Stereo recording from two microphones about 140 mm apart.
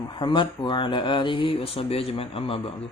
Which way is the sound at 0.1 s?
35° left (ahead or behind).